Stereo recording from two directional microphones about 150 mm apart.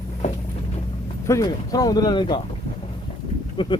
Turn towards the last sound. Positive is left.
turn(degrees=30)  # may be behind; listen again after turning